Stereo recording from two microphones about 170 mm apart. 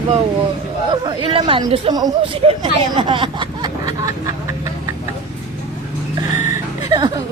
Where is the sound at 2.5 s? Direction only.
30° right (ahead or behind).